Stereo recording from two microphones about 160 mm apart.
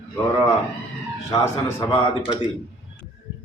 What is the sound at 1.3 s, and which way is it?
Speech, 20° left (ahead or behind).